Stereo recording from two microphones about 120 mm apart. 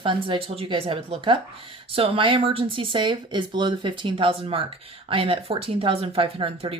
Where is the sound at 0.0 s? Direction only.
45° right (ahead or behind).